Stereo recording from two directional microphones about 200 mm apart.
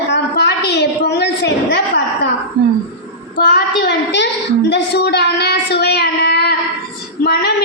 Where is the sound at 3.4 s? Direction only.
55° left (ahead or behind).